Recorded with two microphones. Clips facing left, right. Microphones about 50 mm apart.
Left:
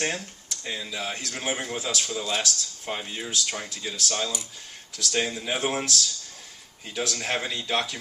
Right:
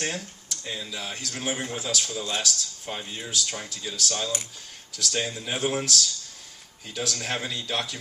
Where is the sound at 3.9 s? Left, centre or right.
Left.